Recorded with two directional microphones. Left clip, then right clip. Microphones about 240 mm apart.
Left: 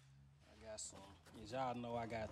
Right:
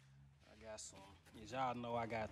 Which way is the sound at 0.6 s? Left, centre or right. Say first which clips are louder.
Left 1 dB; centre.